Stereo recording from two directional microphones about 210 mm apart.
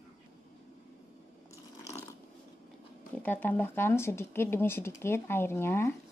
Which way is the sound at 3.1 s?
10° left (ahead or behind).